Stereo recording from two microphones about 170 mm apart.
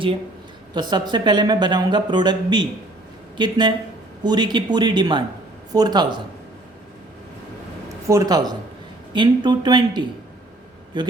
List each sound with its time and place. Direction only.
0.7 s speech: 25° right (ahead or behind)
8.0 s speech: 20° right (ahead or behind)